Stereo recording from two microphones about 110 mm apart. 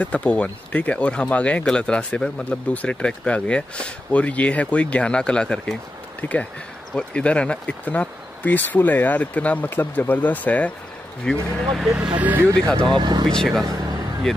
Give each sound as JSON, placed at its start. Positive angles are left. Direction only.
{"t": 0.0, "sound": "speech", "side_deg": 10}
{"t": 11.2, "sound": "speech", "side_deg": 0}
{"t": 12.7, "sound": "speech", "side_deg": -45}
{"t": 13.3, "sound": "speech", "side_deg": 5}